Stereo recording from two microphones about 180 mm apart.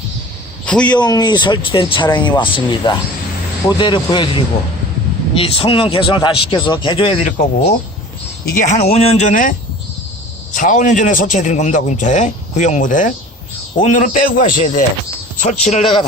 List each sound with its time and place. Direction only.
0.6 s a man's voice: 5° left (ahead or behind)
0.9 s speech: 25° left (ahead or behind)
8.4 s a man's voice: 45° left (ahead or behind)